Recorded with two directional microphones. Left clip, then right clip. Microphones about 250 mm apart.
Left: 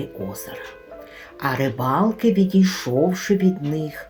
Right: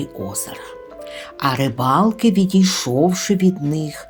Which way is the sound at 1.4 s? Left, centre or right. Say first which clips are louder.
Right 3 dB; right.